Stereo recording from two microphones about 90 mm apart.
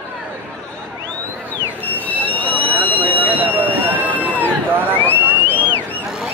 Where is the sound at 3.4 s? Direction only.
20° right (ahead or behind).